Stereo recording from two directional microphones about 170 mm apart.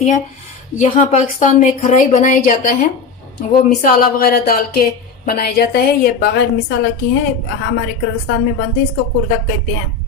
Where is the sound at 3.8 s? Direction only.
55° left (ahead or behind); by 6.7 s 75° left (ahead or behind).